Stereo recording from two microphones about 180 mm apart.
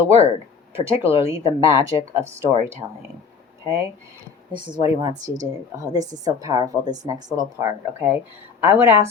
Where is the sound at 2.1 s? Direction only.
15° right (ahead or behind).